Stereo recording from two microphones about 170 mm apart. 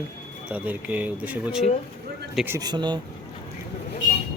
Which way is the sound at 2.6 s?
25° right (ahead or behind).